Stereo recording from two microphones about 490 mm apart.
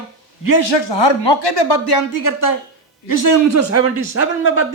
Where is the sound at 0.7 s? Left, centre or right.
Left.